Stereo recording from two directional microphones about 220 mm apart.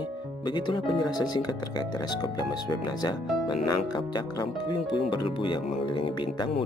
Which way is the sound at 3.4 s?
20° left (ahead or behind).